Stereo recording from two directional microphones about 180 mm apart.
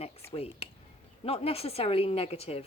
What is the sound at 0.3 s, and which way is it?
A woman's voice, 35° left (ahead or behind).